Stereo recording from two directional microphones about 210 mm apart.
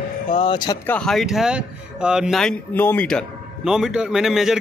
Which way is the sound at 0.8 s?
5° left (ahead or behind).